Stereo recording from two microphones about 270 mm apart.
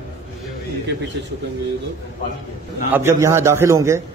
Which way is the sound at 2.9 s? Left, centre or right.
Centre.